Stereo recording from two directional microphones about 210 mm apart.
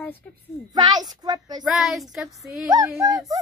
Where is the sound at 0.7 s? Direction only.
20° right (ahead or behind).